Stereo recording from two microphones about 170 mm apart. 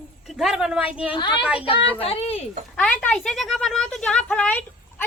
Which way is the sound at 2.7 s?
5° left (ahead or behind).